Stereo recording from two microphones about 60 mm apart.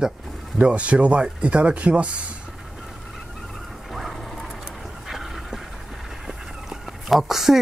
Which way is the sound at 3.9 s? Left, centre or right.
Centre.